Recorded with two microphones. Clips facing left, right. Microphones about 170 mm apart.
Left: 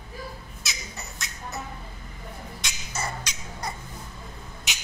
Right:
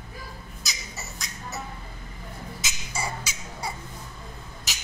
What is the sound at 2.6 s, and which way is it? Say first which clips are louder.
Beatboxing: even; 10° right (ahead or behind).